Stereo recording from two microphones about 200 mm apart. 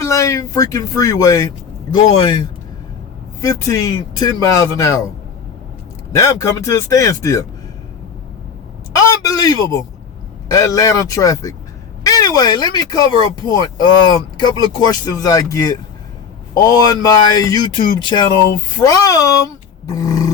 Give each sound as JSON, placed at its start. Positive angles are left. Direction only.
{"t": 0.0, "sound": "speech", "side_deg": 15}
{"t": 3.4, "sound": "speech", "side_deg": 15}
{"t": 6.1, "sound": "speech", "side_deg": 15}
{"t": 9.0, "sound": "a sound", "side_deg": 15}
{"t": 10.5, "sound": "speech", "side_deg": 15}